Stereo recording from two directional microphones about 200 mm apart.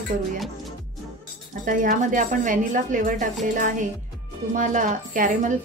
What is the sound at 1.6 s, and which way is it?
A woman's voice, 40° right (ahead or behind).